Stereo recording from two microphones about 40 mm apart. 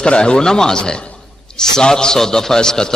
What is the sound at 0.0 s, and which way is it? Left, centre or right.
A man's voice, left.